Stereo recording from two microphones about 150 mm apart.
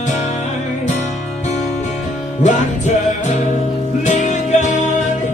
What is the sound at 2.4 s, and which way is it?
Music, 50° left (ahead or behind).